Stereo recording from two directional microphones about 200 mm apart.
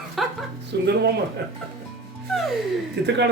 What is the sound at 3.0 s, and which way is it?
Speech, 60° right (ahead or behind).